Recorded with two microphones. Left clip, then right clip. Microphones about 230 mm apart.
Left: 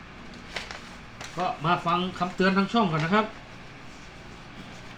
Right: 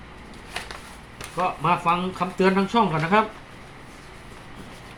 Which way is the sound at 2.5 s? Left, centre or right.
Right.